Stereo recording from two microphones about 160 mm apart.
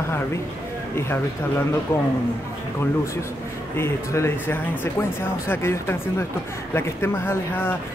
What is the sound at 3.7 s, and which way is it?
Speech, 15° left (ahead or behind).